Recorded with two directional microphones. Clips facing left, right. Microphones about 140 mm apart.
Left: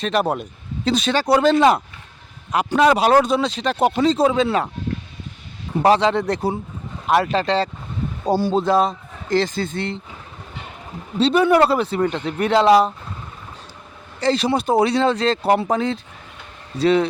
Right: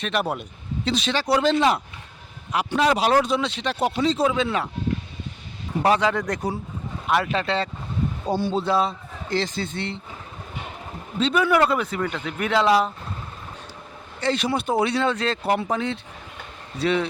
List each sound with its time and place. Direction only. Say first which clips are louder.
0.0 s a man's voice: left 5 dB; 40° left (ahead or behind)
5.8 s a man's voice: left 5 dB; 30° left (ahead or behind)
11.2 s speech: left 5 dB; 30° left (ahead or behind)
14.2 s speech: left 5 dB; 35° left (ahead or behind)